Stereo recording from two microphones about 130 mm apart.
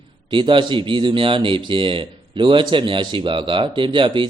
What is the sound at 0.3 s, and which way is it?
Speech, 40° right (ahead or behind).